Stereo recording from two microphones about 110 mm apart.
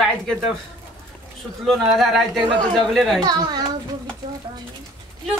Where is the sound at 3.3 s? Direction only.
40° right (ahead or behind).